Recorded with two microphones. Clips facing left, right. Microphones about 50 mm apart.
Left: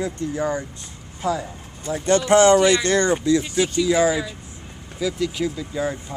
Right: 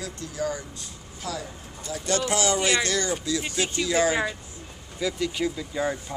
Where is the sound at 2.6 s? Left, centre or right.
Right.